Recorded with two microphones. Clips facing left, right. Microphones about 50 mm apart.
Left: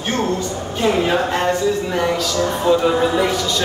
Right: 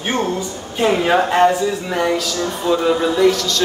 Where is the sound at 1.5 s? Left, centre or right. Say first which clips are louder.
Even; centre.